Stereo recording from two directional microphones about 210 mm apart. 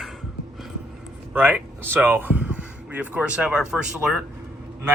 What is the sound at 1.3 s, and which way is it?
Speech, 10° right (ahead or behind).